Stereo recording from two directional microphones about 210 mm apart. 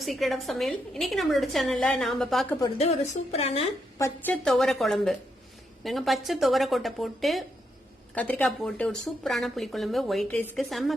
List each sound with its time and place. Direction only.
0.0 s a woman's voice: centre (ahead or behind)
2.7 s a woman's voice: 30° left (ahead or behind)
3.9 s a woman's voice: 15° left (ahead or behind)
4.4 s a woman's voice: centre (ahead or behind)